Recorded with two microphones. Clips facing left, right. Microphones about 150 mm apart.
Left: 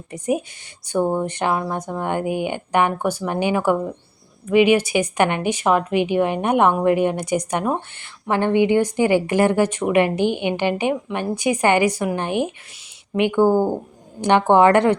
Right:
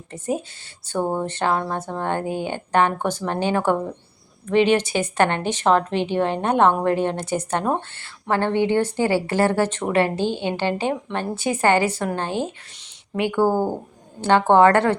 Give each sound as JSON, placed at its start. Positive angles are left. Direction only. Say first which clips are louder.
{"t": 0.1, "sound": "speech", "louder": "left 3 dB", "side_deg": 15}